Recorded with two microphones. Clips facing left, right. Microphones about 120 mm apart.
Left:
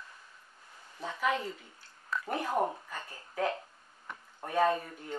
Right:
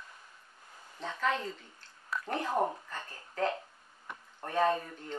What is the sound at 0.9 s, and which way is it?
A woman's voice, 10° left (ahead or behind).